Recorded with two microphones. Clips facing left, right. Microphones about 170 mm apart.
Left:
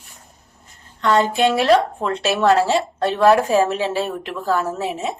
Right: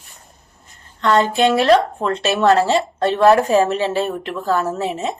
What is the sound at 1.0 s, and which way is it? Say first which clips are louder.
A woman's voice: right 1 dB; 5° left (ahead or behind).